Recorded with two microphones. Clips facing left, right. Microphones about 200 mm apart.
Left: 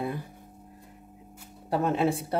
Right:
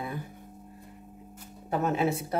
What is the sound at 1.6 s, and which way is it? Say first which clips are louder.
Speech: left 2 dB; 30° left (ahead or behind).